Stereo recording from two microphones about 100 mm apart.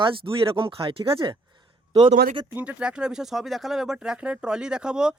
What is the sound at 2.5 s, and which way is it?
Speech, 15° right (ahead or behind).